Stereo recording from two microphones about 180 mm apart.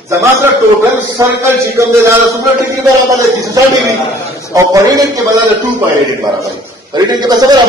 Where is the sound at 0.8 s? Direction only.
15° right (ahead or behind).